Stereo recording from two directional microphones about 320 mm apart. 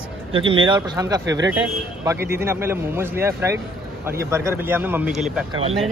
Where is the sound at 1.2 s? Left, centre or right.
Right.